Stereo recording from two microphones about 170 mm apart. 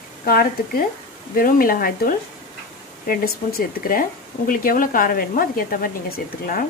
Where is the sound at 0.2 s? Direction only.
60° left (ahead or behind).